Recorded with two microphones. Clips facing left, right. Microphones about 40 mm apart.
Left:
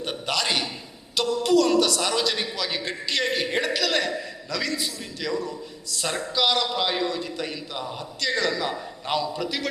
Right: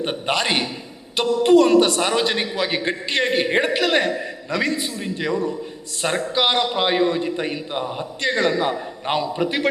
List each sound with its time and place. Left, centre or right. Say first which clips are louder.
0.0 s a man's voice: right 5 dB; right